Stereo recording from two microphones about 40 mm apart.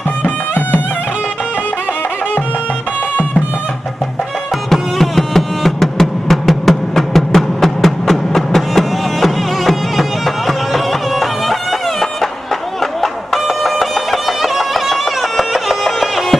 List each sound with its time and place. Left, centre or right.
0.2 s music: left
4.6 s music: centre
13.0 s music: centre